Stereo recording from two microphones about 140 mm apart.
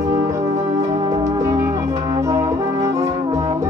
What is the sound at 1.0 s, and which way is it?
Music, 35° right (ahead or behind).